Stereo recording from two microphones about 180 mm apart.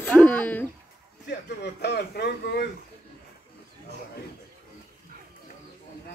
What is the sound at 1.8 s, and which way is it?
Speech, 65° left (ahead or behind).